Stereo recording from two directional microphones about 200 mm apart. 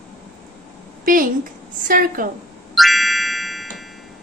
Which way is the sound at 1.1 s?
45° right (ahead or behind).